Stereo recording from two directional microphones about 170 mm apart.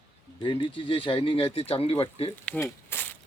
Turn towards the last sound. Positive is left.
turn(degrees=10)  # may be behind; listen again after turning